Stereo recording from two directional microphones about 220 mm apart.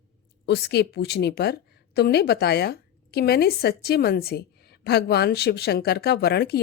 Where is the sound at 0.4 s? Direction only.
50° left (ahead or behind).